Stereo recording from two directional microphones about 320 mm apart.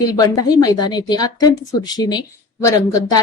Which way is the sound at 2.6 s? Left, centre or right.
Centre.